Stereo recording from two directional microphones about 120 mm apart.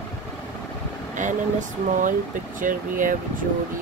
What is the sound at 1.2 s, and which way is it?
Speech, 90° right.